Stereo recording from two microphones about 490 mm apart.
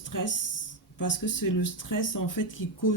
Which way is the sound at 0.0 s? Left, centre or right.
Left.